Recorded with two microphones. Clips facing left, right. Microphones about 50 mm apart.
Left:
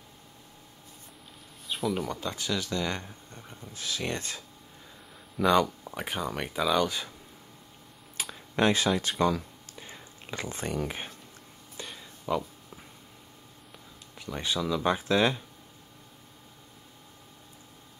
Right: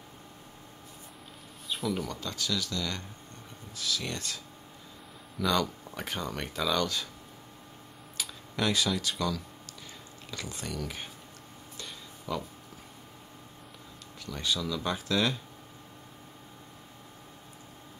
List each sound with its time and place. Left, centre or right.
1.7 s a sound: centre
2.0 s speech: left
5.4 s speech: left
8.5 s speech: left
9.2 s a sound: left
12.3 s speech: left
14.2 s speech: left